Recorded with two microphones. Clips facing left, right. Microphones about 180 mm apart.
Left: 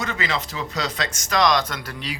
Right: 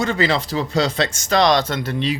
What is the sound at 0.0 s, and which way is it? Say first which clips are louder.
Speech: right 7 dB; 30° right (ahead or behind).